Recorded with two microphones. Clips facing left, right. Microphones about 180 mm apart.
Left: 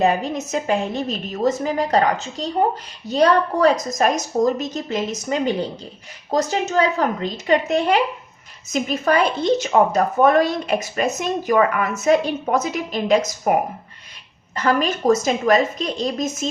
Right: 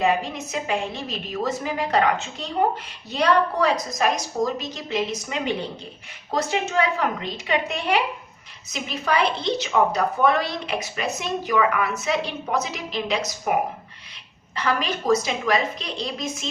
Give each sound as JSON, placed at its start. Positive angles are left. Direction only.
{"t": 0.0, "sound": "a woman's voice", "side_deg": 40}